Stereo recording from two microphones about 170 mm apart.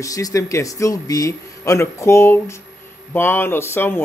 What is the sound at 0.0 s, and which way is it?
Speech, 20° left (ahead or behind).